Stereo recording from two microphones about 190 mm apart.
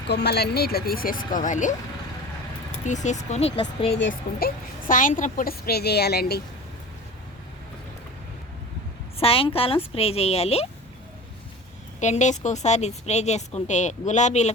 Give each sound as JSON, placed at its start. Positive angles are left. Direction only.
{"t": 0.1, "sound": "a woman's voice", "side_deg": 60}
{"t": 2.8, "sound": "speech", "side_deg": 40}
{"t": 4.1, "sound": "a woman's voice", "side_deg": 50}
{"t": 9.1, "sound": "speech", "side_deg": 30}
{"t": 11.9, "sound": "speech", "side_deg": 40}